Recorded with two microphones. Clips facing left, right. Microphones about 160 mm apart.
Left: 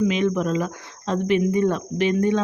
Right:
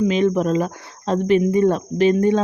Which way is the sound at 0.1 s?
35° right (ahead or behind).